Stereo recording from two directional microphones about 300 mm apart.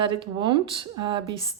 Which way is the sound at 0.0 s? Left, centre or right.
Centre.